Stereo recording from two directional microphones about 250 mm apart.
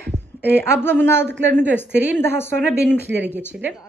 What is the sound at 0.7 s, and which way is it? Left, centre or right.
Speech, centre.